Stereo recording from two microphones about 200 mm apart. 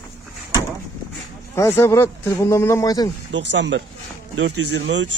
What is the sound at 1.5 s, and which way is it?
Speech, 15° left (ahead or behind).